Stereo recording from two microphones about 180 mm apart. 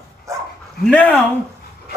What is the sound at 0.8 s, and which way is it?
Speech, 10° left (ahead or behind).